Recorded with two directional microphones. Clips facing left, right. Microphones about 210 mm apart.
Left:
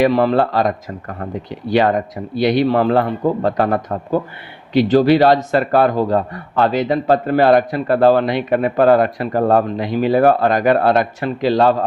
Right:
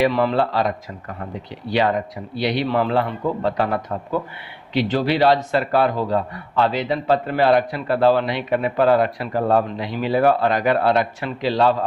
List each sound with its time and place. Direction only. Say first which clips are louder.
0.0 s a man's voice: left 4 dB; 40° left (ahead or behind)